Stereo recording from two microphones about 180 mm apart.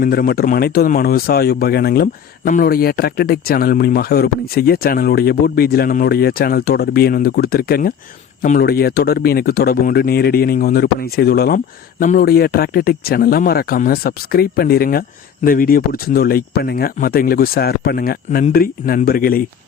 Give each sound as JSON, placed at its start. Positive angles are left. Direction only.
{"t": 0.0, "sound": "speech", "side_deg": 55}